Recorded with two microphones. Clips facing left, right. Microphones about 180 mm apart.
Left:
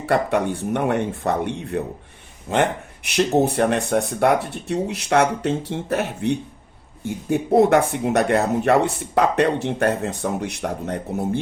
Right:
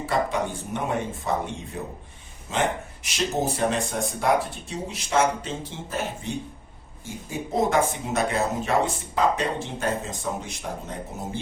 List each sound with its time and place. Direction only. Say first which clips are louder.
0.0 s speech: left 5 dB; 65° left (ahead or behind)